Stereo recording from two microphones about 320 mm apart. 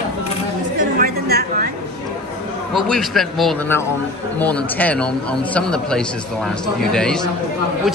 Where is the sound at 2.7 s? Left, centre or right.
Centre.